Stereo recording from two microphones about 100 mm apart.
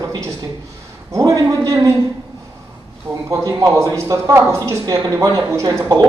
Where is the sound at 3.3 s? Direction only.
35° right (ahead or behind).